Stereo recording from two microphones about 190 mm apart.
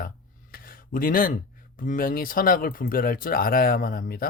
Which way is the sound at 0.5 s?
50° left (ahead or behind).